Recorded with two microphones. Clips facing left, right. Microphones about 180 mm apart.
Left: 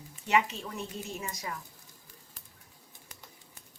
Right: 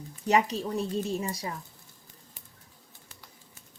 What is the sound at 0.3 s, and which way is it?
A woman's voice, 40° right (ahead or behind).